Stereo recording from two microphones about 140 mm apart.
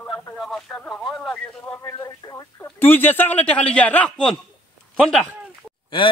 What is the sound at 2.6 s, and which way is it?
Speech, 15° left (ahead or behind).